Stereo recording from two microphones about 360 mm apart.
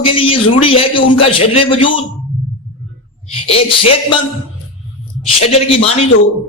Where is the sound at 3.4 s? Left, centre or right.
Centre.